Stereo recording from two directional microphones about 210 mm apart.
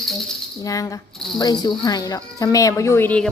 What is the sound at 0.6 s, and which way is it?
Speech, 15° left (ahead or behind).